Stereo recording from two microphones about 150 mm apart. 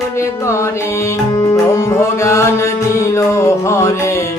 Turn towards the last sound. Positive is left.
turn(degrees=20)  # may be behind; listen again after turning